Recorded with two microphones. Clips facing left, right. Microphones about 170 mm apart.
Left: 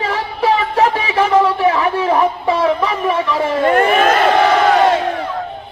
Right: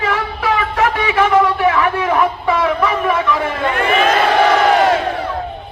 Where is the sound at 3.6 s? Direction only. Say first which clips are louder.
Left 4 dB; 50° left (ahead or behind).